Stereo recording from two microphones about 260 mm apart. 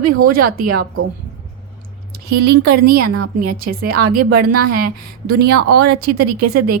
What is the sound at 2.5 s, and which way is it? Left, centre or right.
A woman's voice, right.